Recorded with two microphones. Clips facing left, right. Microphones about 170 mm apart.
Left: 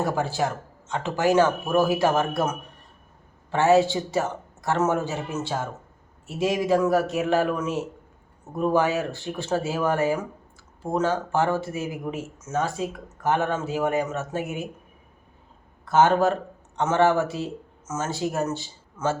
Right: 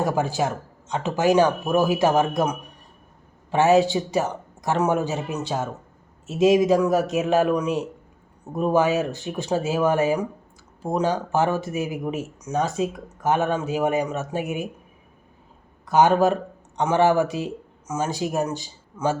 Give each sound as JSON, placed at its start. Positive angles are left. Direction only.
{"t": 0.0, "sound": "speech", "side_deg": -15}
{"t": 15.9, "sound": "speech", "side_deg": -15}